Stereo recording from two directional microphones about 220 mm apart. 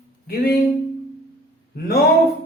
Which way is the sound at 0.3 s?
45° left (ahead or behind).